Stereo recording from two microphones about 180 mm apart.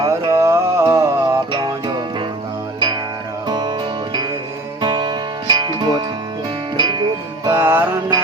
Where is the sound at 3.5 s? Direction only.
25° right (ahead or behind).